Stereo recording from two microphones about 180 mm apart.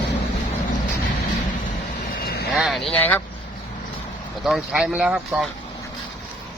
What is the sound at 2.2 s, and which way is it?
Vehicle, 60° left (ahead or behind).